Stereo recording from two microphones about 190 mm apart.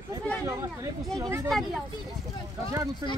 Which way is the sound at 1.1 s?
15° right (ahead or behind).